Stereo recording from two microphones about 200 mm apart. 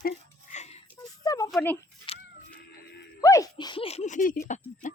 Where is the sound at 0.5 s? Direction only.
35° left (ahead or behind).